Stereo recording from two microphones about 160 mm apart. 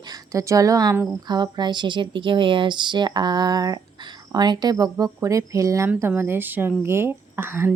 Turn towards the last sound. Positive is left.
turn(degrees=-15)  # may be behind; listen again after turning